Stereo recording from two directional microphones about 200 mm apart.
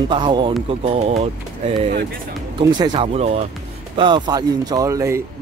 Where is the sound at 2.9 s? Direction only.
35° right (ahead or behind).